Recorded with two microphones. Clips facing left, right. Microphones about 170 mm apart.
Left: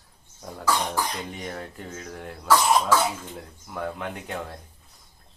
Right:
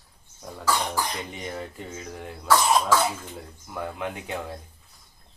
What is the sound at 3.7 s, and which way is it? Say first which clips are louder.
Speech: even; centre (ahead or behind).